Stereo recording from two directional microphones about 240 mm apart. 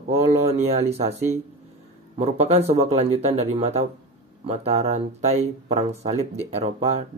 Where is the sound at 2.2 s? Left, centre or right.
Right.